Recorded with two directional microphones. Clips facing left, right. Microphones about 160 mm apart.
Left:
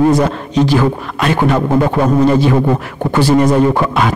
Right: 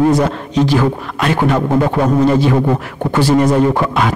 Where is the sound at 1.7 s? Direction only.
25° left (ahead or behind).